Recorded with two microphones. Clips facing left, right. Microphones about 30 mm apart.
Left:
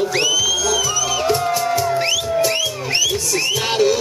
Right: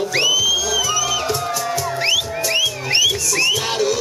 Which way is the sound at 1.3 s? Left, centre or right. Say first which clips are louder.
Left 4 dB; centre.